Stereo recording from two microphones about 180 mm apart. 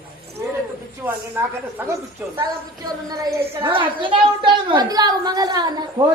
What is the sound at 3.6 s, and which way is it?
A woman's voice, 30° right (ahead or behind).